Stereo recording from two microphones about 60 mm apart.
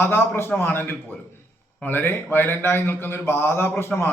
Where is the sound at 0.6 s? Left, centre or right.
Left.